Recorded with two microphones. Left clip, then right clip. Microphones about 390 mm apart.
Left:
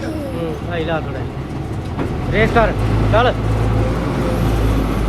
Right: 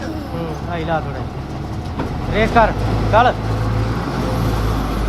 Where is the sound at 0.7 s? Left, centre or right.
Centre.